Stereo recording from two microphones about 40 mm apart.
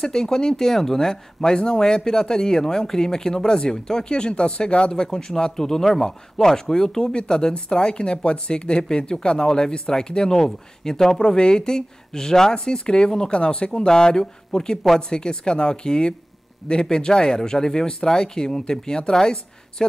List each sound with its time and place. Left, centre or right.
0.0 s speech: centre; by 4.9 s left
4.9 s a woman's voice: centre